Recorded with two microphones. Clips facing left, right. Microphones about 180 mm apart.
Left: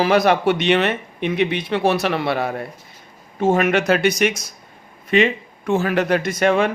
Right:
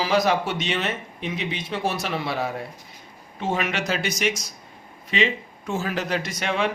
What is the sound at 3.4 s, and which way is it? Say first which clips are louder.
A man's voice: left 9 dB; 50° left (ahead or behind).